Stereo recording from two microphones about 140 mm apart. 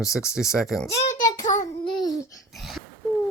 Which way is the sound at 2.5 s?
Centre (ahead or behind).